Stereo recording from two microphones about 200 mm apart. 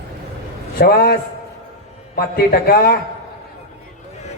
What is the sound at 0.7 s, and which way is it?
A man's voice, 50° left (ahead or behind).